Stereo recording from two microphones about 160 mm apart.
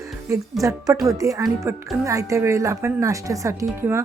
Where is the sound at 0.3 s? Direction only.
20° right (ahead or behind).